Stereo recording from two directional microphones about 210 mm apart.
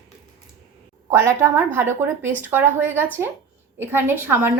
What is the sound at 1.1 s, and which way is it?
A woman's voice, 10° right (ahead or behind).